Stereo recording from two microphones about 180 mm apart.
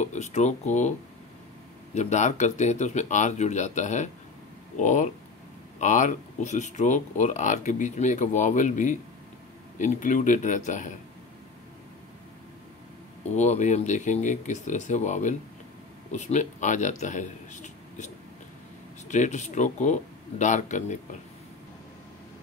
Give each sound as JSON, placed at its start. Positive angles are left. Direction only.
{"t": 0.0, "sound": "speech", "side_deg": 40}
{"t": 2.0, "sound": "speech", "side_deg": 40}
{"t": 13.3, "sound": "speech", "side_deg": 40}